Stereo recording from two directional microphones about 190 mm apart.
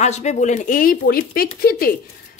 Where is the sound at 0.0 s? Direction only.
35° left (ahead or behind).